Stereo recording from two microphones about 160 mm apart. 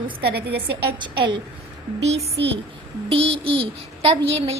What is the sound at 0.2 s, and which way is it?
Speech, 80° right.